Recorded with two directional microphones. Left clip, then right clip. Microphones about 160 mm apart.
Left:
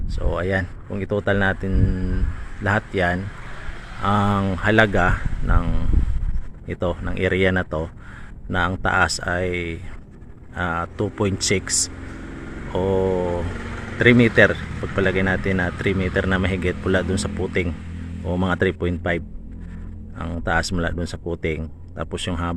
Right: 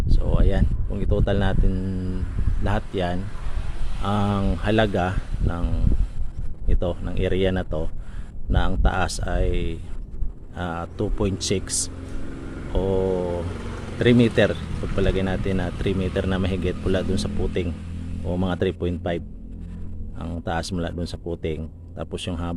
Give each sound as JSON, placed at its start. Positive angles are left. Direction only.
{"t": 0.1, "sound": "speech", "side_deg": 0}
{"t": 13.1, "sound": "vehicle", "side_deg": 30}
{"t": 14.0, "sound": "speech", "side_deg": -5}